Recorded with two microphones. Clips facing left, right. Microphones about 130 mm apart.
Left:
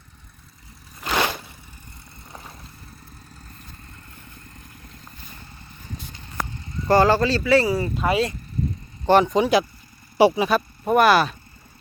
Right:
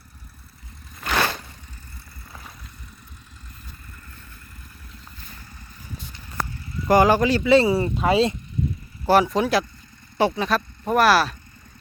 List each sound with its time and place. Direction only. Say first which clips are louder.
1.0 s vehicle: even; 15° left (ahead or behind)
6.8 s speech: even; 15° right (ahead or behind)
9.0 s speech: left 1 dB; 5° right (ahead or behind)